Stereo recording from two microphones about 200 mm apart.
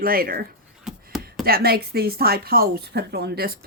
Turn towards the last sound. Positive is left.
turn(degrees=-50)  # may be behind; listen again after turning